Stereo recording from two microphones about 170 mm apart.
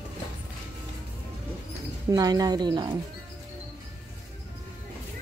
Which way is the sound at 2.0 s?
20° right (ahead or behind).